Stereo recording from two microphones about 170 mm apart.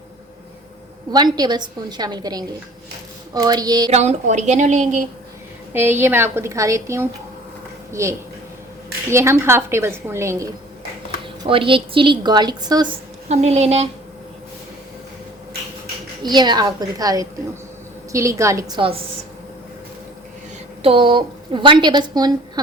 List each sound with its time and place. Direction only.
1.1 s a woman's voice: 25° right (ahead or behind)
3.9 s a woman's voice: 45° right (ahead or behind)
5.7 s a woman's voice: 15° right (ahead or behind)
11.4 s a woman's voice: 30° right (ahead or behind)
13.2 s a woman's voice: 40° right (ahead or behind)
16.2 s a woman's voice: 25° right (ahead or behind)
20.8 s a woman's voice: 30° right (ahead or behind)